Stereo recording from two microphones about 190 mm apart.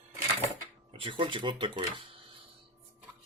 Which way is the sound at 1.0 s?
25° right (ahead or behind).